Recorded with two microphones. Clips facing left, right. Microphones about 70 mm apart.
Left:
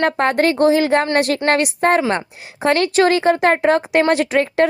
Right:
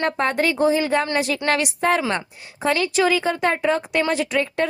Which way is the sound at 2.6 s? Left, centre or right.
Left.